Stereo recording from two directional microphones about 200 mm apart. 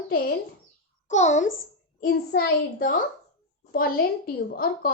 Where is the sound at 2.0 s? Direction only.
50° left (ahead or behind).